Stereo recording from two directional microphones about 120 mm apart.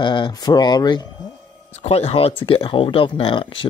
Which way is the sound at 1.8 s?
55° left (ahead or behind).